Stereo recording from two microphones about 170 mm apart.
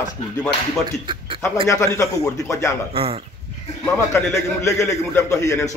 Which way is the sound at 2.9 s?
35° right (ahead or behind).